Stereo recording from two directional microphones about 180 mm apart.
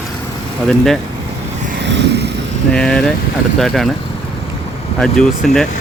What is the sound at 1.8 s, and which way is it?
Vehicle, 70° right (ahead or behind).